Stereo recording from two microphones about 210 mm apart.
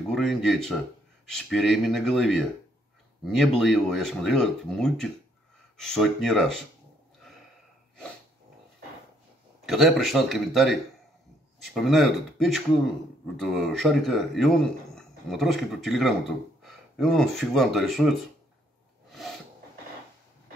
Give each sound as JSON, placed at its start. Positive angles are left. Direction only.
{"t": 0.1, "sound": "speech", "side_deg": 0}
{"t": 9.7, "sound": "speech", "side_deg": 0}